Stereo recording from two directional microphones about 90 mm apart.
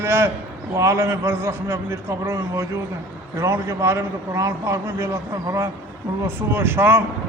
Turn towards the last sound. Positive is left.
turn(degrees=-25)  # may be behind; listen again after turning